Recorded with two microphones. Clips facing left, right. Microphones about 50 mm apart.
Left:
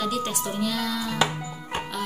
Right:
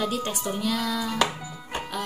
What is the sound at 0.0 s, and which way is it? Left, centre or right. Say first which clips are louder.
Speech: left 1 dB; centre.